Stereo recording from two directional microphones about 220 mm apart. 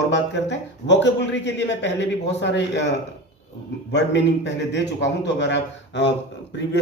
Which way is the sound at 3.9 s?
55° left (ahead or behind).